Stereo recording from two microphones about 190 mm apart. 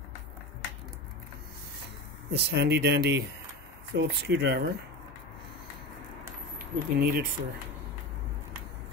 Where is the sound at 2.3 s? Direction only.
60° right (ahead or behind).